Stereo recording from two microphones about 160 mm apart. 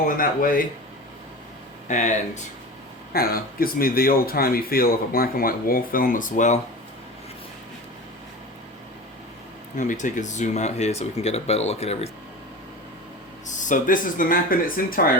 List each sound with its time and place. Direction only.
0.2 s speech: 60° left (ahead or behind)
1.9 s speech: 50° left (ahead or behind)
3.1 s speech: 70° left (ahead or behind); by 6.6 s 50° left (ahead or behind)
9.7 s speech: 50° left (ahead or behind)
13.6 s speech: 55° left (ahead or behind)